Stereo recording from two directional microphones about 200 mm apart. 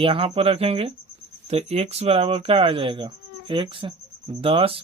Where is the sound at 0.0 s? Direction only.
25° right (ahead or behind).